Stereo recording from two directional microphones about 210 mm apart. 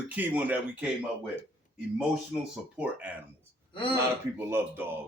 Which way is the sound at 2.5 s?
5° right (ahead or behind).